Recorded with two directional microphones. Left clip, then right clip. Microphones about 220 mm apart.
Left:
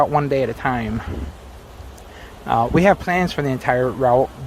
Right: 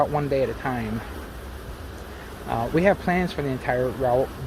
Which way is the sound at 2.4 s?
30° left (ahead or behind).